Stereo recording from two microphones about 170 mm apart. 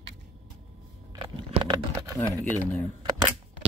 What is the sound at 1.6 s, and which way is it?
Horse, 20° right (ahead or behind).